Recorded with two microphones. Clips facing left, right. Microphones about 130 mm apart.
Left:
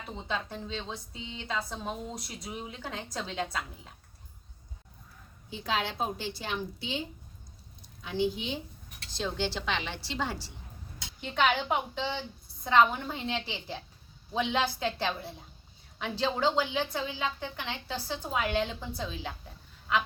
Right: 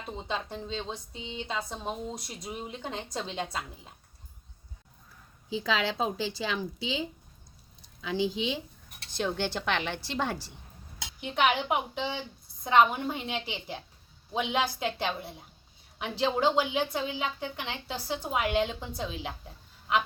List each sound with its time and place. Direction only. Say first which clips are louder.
0.2 s a woman's voice: even; 15° right (ahead or behind)
5.5 s a woman's voice: right 3 dB; 90° right
8.0 s a woman's voice: right 1 dB; 90° right
9.0 s speech: right 2 dB; 55° right (ahead or behind)
11.2 s a woman's voice: right 1 dB; 15° right (ahead or behind)